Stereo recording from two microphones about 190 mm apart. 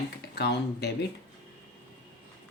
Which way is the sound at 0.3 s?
60° left (ahead or behind).